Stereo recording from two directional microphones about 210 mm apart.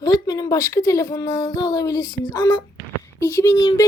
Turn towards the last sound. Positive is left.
turn(degrees=15)  # may be behind; listen again after turning